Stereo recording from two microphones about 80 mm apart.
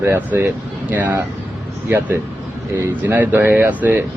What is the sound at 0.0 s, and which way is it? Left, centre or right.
Speech, right.